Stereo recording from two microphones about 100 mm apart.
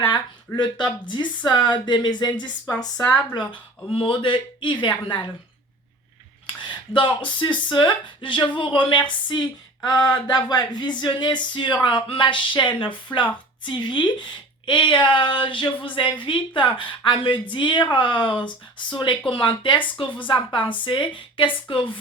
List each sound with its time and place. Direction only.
0.0 s speech: 50° left (ahead or behind)
3.3 s speech: 50° left (ahead or behind)
6.6 s a woman's voice: 50° left (ahead or behind)